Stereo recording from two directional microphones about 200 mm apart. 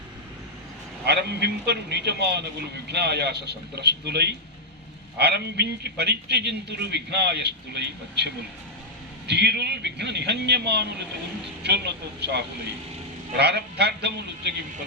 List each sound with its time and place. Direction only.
1.0 s a man's voice: 55° right (ahead or behind)